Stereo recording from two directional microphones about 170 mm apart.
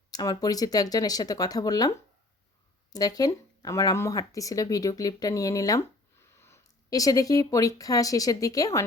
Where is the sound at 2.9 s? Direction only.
20° left (ahead or behind).